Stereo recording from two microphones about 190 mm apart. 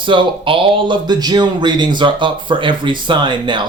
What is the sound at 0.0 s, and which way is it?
Speech, 25° right (ahead or behind).